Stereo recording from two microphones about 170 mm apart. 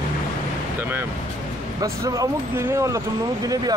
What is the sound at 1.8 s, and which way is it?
Speech, 20° right (ahead or behind).